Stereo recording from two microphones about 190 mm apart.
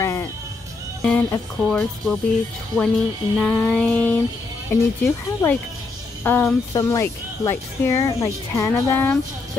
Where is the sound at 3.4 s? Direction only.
5° left (ahead or behind).